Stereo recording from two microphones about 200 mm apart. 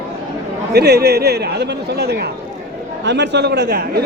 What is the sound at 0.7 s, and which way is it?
A man's voice, 55° right (ahead or behind).